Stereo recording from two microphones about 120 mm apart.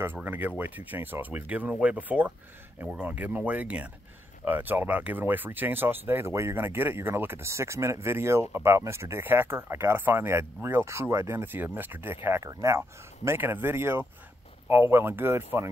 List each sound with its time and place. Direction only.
0.0 s speech: 15° right (ahead or behind)